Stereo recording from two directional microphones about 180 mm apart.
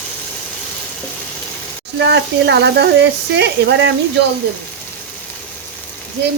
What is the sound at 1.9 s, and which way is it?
Speech, 75° right (ahead or behind).